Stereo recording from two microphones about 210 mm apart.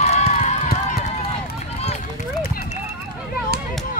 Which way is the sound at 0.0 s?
30° left (ahead or behind).